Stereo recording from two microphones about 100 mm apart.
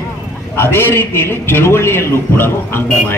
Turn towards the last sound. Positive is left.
turn(degrees=25)  # may be behind; listen again after turning